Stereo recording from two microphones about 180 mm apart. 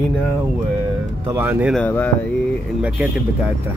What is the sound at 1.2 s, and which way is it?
Speech, 10° right (ahead or behind).